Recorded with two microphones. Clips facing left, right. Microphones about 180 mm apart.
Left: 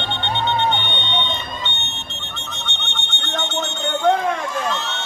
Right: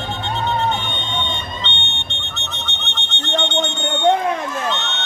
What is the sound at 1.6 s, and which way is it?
Smoke detector, 5° left (ahead or behind).